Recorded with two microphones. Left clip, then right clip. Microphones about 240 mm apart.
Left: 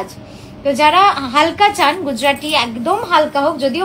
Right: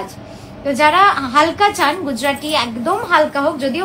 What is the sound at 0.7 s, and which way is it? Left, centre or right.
A woman's voice, left.